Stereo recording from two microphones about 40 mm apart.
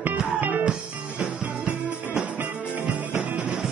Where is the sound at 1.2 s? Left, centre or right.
Right.